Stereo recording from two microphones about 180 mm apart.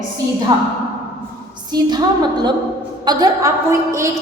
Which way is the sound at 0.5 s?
25° right (ahead or behind).